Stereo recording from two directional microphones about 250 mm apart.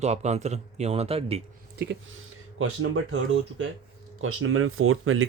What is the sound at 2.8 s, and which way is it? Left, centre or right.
Speech, right.